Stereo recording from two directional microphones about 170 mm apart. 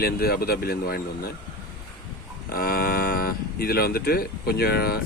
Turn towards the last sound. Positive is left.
turn(degrees=65)  # may be behind; listen again after turning